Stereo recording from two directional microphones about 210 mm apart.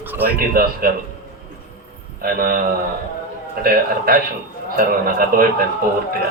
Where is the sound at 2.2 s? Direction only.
45° right (ahead or behind).